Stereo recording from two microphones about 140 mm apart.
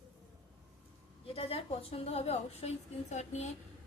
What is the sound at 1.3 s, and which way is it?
A woman's voice, 45° left (ahead or behind).